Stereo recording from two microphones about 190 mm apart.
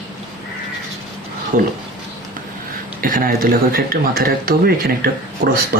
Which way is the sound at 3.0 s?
50° right (ahead or behind).